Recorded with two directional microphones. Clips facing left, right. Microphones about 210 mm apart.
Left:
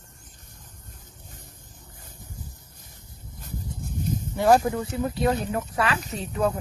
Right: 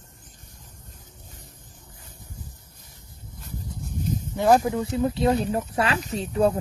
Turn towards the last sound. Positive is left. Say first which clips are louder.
# right 4 dB
turn(degrees=-30)  # may be behind; listen again after turning